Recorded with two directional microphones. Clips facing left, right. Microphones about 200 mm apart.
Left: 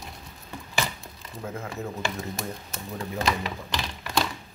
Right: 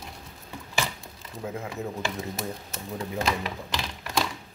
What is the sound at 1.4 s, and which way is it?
Speech, 15° right (ahead or behind).